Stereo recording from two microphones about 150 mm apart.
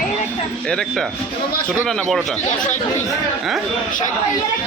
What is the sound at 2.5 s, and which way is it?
Speech, 55° left (ahead or behind).